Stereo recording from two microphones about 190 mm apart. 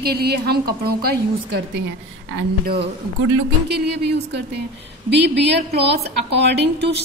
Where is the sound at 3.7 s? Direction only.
60° right (ahead or behind).